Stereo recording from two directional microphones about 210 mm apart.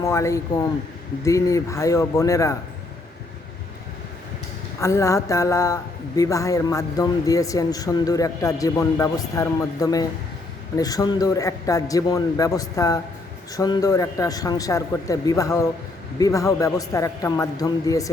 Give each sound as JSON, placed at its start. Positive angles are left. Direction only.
{"t": 0.0, "sound": "speech", "side_deg": 15}
{"t": 4.8, "sound": "speech", "side_deg": 15}